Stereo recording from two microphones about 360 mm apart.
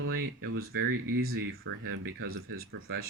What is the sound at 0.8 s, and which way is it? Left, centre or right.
Speech, right.